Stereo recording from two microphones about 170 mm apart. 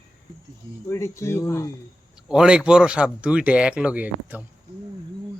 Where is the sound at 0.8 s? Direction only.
15° left (ahead or behind).